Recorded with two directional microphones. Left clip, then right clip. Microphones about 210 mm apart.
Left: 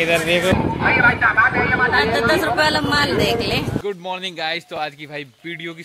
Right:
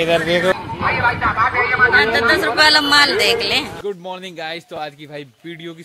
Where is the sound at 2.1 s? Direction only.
25° left (ahead or behind).